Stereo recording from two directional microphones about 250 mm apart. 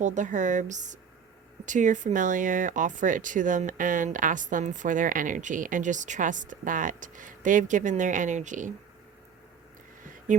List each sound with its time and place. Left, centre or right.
0.0 s speech: right